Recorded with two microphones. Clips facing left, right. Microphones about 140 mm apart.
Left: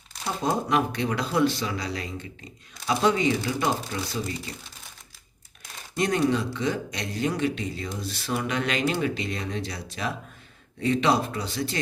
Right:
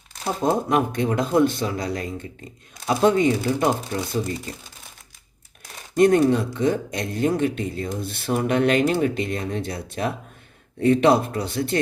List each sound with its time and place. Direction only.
0.3 s speech: 45° right (ahead or behind)
6.0 s speech: 50° right (ahead or behind)